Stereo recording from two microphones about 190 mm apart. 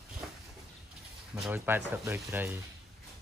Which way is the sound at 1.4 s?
10° right (ahead or behind).